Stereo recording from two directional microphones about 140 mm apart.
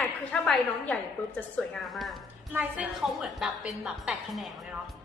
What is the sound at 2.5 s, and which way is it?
A woman's voice, 10° right (ahead or behind).